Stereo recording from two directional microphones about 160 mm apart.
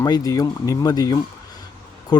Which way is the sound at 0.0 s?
25° left (ahead or behind).